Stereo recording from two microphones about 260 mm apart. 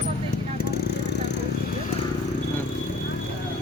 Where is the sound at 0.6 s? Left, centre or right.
Left.